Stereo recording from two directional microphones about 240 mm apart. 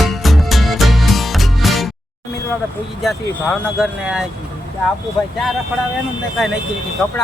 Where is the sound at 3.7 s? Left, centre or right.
Centre.